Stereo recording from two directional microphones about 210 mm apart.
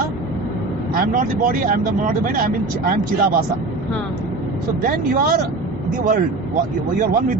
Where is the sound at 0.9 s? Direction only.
45° right (ahead or behind).